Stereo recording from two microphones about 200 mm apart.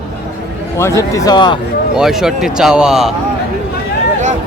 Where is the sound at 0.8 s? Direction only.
15° left (ahead or behind).